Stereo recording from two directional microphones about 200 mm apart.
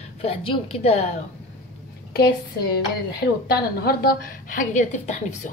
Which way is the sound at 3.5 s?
50° left (ahead or behind).